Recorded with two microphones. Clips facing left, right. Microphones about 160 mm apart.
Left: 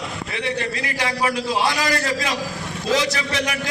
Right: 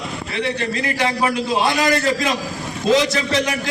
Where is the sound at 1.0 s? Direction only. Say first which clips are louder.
Right 1 dB; 25° right (ahead or behind).